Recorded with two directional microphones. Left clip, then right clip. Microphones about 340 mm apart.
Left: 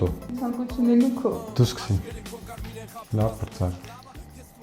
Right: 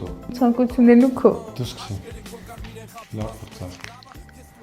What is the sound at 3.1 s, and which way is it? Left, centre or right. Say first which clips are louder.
Speech: left 6 dB; left.